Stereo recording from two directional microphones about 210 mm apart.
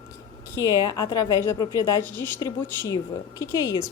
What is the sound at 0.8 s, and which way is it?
A woman's voice, 20° left (ahead or behind).